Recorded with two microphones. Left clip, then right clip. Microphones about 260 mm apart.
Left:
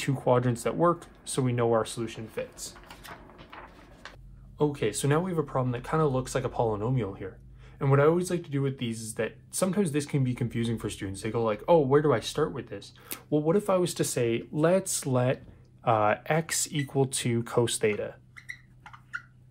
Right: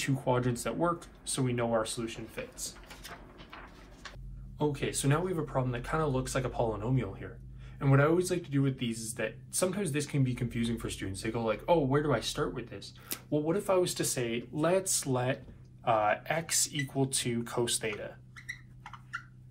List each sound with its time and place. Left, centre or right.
0.0 s speech: left
4.6 s speech: left